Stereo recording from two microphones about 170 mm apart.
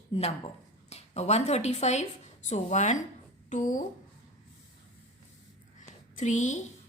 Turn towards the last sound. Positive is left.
turn(degrees=45)  # may be behind; listen again after turning